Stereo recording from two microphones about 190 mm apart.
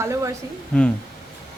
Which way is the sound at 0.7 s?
5° left (ahead or behind).